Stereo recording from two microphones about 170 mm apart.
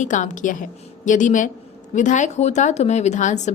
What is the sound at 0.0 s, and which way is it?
A woman's voice, 45° left (ahead or behind).